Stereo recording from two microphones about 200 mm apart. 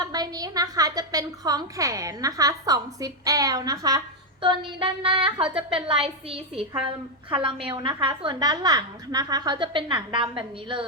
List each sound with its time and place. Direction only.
0.0 s a woman's voice: 20° right (ahead or behind)
7.3 s a woman's voice: 25° right (ahead or behind)